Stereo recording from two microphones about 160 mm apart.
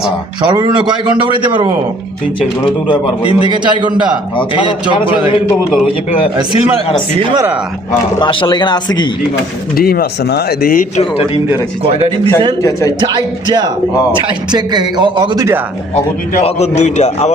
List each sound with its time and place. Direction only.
0.4 s a man's voice: 25° right (ahead or behind)
2.8 s a man's voice: 35° left (ahead or behind)
3.5 s a man's voice: 30° right (ahead or behind)
4.4 s a man's voice: 30° left (ahead or behind)
8.2 s speech: 30° left (ahead or behind)
9.7 s speech: 70° left (ahead or behind)
11.8 s speech: 40° right (ahead or behind)
13.0 s a man's voice: 30° right (ahead or behind)
16.4 s a man's voice: 45° left (ahead or behind)